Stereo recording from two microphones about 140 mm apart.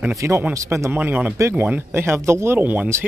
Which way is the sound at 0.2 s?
20° right (ahead or behind).